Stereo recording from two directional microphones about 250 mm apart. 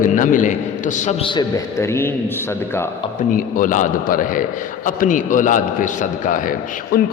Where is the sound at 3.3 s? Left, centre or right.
Left.